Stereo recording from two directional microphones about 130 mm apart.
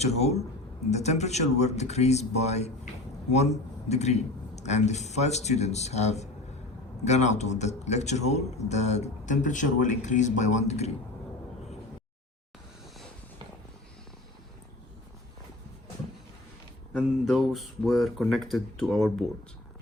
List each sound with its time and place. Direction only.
0.0 s speech: 55° left (ahead or behind)
16.9 s speech: centre (ahead or behind)